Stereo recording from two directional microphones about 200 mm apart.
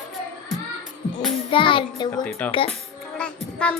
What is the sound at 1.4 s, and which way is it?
Child singing, 25° left (ahead or behind).